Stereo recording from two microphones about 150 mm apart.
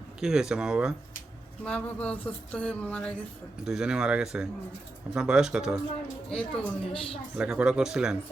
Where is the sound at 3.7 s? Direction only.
5° right (ahead or behind).